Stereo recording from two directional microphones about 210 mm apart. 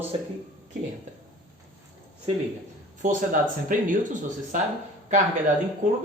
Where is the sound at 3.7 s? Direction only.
40° right (ahead or behind).